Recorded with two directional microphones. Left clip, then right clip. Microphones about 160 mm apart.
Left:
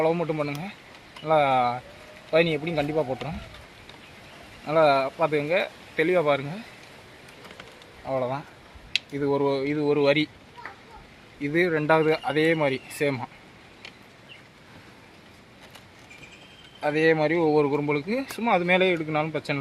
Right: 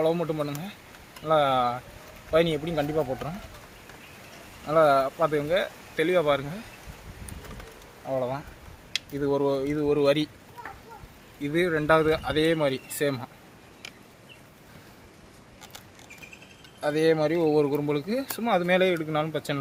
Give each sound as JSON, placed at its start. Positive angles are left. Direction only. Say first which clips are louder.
{"t": 0.0, "sound": "speech", "louder": "left 1 dB", "side_deg": 25}
{"t": 4.6, "sound": "speech", "louder": "even", "side_deg": 25}
{"t": 8.0, "sound": "speech", "louder": "left 1 dB", "side_deg": 25}
{"t": 11.4, "sound": "speech", "louder": "left 1 dB", "side_deg": 30}
{"t": 16.8, "sound": "speech", "louder": "left 1 dB", "side_deg": 20}